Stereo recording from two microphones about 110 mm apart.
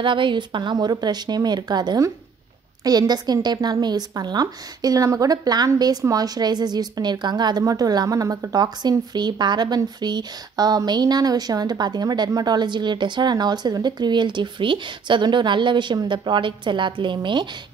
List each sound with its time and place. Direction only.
0.0 s speech: 50° right (ahead or behind)